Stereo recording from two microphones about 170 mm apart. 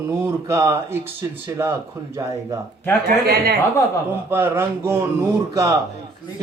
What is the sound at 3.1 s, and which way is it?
Speech, 60° right (ahead or behind).